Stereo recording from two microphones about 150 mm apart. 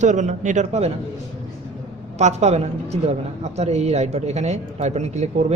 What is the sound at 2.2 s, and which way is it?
A woman's voice, 50° right (ahead or behind).